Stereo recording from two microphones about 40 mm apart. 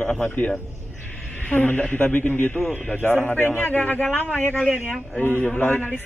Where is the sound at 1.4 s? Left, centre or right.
Left.